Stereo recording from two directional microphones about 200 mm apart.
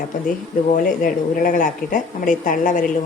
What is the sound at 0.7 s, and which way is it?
Speech, 45° left (ahead or behind).